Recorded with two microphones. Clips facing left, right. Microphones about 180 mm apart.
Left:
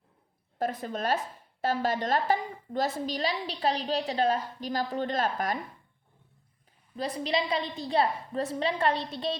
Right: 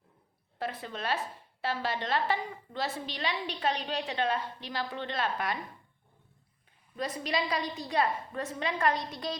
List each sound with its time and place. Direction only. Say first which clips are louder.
0.6 s a woman's voice: left 5 dB; 45° left (ahead or behind)
6.9 s a woman's voice: left 3 dB; 30° left (ahead or behind)